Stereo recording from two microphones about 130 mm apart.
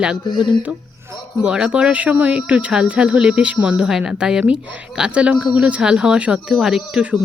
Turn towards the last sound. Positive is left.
turn(degrees=-5)  # may be behind; listen again after turning